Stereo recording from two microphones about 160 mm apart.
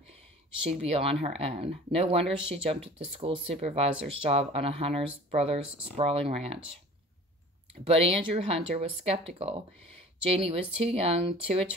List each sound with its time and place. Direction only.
0.7 s speech: 40° right (ahead or behind)
7.8 s speech: 35° right (ahead or behind)